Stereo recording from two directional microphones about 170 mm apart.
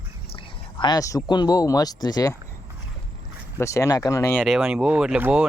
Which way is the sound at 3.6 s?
15° left (ahead or behind).